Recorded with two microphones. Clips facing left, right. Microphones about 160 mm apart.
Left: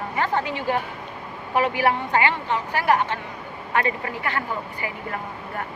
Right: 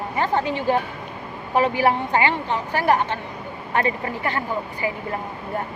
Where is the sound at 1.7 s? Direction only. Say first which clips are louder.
Right 2 dB; 20° right (ahead or behind).